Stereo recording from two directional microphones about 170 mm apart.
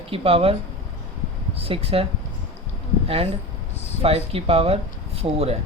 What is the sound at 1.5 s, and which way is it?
Speech, 35° right (ahead or behind).